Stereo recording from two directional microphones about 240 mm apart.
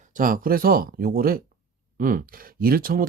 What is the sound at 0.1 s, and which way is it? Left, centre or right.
Speech, right.